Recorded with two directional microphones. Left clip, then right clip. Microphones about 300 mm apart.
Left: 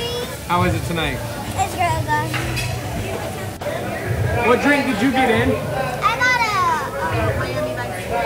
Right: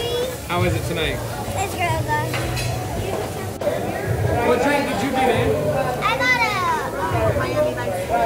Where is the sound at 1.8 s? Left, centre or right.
Centre.